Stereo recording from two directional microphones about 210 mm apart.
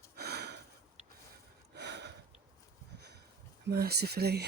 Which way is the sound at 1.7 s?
55° right (ahead or behind).